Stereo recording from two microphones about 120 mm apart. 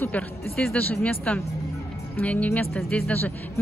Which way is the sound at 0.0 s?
10° left (ahead or behind).